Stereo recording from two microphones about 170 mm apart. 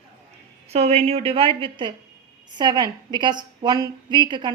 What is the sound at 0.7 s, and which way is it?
A woman's voice, 40° right (ahead or behind).